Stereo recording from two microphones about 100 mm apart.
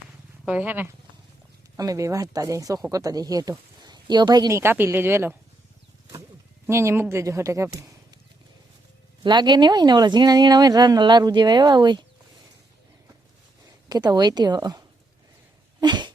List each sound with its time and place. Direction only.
0.4 s speech: 15° right (ahead or behind)
1.7 s speech: 35° right (ahead or behind)
4.5 s speech: 20° right (ahead or behind)
6.7 s speech: 25° right (ahead or behind)
9.2 s speech: 45° right (ahead or behind)
13.8 s speech: 40° right (ahead or behind)
15.8 s a sound: 50° right (ahead or behind)